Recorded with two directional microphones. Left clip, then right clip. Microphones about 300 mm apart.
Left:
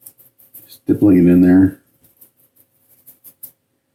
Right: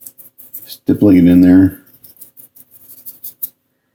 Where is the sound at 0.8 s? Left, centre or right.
Right.